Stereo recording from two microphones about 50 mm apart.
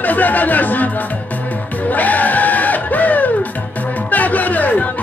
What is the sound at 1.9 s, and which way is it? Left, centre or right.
Music, left.